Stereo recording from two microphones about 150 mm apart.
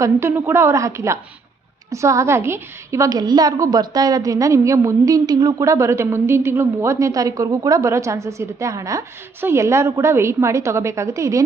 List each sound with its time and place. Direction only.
0.0 s a woman's voice: 15° right (ahead or behind)